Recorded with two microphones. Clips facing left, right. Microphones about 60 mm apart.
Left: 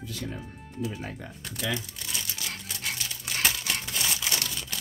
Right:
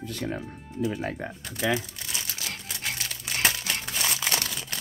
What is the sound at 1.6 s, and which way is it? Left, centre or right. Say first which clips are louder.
Speech: right 6 dB; right.